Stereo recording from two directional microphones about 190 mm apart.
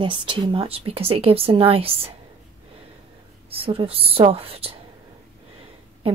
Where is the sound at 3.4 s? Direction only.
30° right (ahead or behind).